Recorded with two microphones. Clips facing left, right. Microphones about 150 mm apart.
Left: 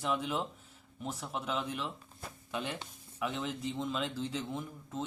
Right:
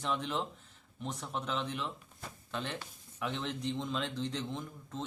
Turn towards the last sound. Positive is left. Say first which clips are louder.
# left 2 dB
turn(degrees=5)  # may be behind; listen again after turning